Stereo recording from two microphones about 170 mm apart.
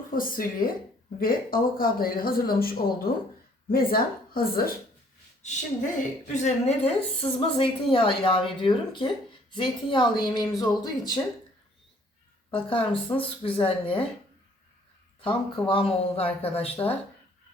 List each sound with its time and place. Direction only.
0.1 s speech: 55° left (ahead or behind)
6.3 s a woman's voice: 40° left (ahead or behind); by 11.2 s 25° left (ahead or behind)
12.5 s a woman's voice: 30° left (ahead or behind)
15.2 s a woman's voice: 30° left (ahead or behind)